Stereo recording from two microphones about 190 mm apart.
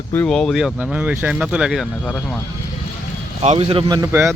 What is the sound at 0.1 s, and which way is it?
Speech, 5° left (ahead or behind).